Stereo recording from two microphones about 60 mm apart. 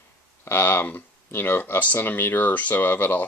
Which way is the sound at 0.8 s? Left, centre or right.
Left.